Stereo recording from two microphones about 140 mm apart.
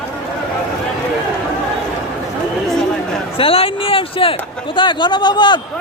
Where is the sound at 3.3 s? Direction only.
40° left (ahead or behind).